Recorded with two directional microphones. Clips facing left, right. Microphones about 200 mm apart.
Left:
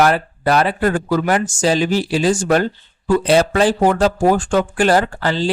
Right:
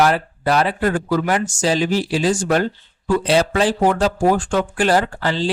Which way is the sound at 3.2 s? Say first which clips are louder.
Left 3 dB; 50° left (ahead or behind).